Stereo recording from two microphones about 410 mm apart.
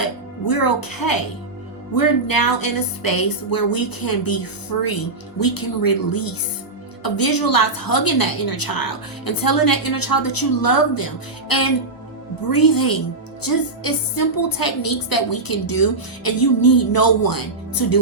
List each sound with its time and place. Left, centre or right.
0.4 s a woman's voice: left